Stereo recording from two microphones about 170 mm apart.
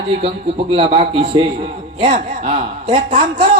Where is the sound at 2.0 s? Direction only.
45° right (ahead or behind).